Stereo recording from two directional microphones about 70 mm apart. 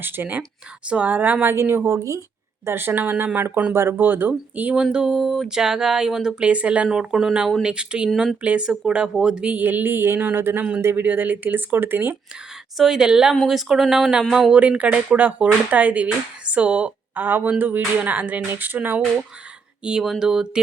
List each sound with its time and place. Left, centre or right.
0.0 s speech: right
2.6 s speech: right
4.7 s speech: centre; by 11.0 s right
11.0 s speech: right
12.7 s speech: centre
14.5 s speech: centre
20.0 s speech: centre